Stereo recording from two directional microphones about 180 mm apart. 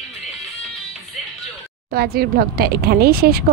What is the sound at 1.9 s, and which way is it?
Speech, 60° right (ahead or behind).